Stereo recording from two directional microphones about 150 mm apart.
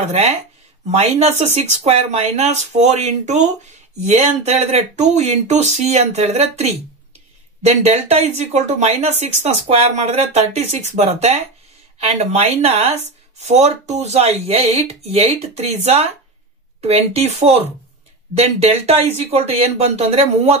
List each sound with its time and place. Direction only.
0.0 s speech: 45° right (ahead or behind)